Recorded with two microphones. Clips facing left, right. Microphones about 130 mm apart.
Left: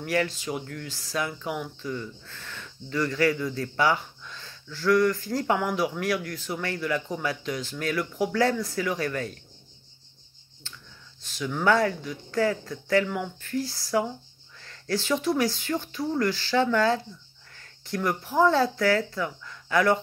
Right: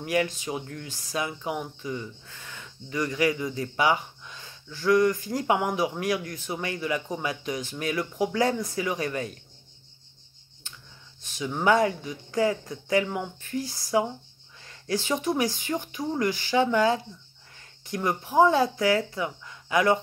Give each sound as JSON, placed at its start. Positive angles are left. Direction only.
{"t": 0.0, "sound": "speech", "side_deg": -20}
{"t": 11.2, "sound": "speech", "side_deg": -20}